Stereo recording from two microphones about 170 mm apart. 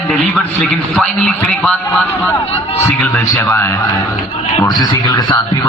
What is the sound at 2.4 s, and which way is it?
Speech, 35° left (ahead or behind).